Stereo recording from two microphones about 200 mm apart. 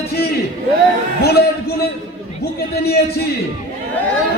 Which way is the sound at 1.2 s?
55° left (ahead or behind).